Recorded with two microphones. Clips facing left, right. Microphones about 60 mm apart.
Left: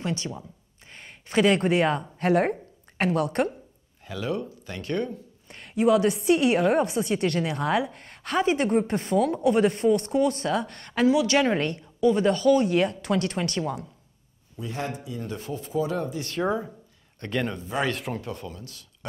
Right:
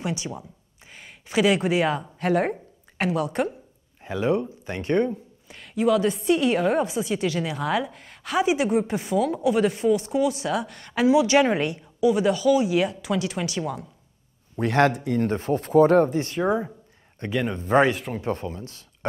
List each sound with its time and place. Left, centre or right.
0.0 s a woman's voice: centre
4.0 s speech: right
5.5 s a woman's voice: centre
14.6 s a man's voice: right
15.3 s speech: right
15.6 s speech: right
17.2 s speech: centre
17.9 s a woman's voice: centre
18.2 s speech: right